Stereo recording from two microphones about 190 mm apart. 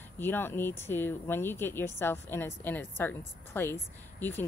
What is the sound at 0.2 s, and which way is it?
A woman's voice, 10° left (ahead or behind).